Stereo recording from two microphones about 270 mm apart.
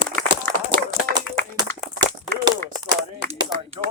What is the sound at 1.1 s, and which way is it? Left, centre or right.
Clapping, centre.